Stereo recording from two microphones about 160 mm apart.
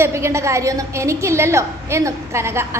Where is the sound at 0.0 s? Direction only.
15° right (ahead or behind).